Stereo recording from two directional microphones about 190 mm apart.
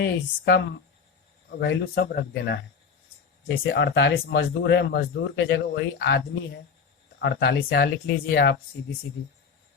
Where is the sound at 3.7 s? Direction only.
65° left (ahead or behind).